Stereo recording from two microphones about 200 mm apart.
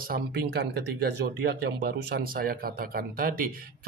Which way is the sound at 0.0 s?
50° right (ahead or behind).